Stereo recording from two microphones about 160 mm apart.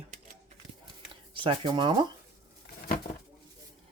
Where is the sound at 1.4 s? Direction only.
30° right (ahead or behind).